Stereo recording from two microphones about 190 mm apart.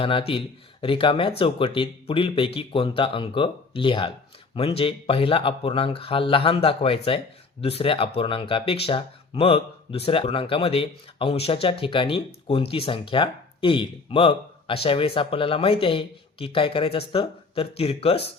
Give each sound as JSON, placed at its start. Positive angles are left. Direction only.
{"t": 0.0, "sound": "speech", "side_deg": 30}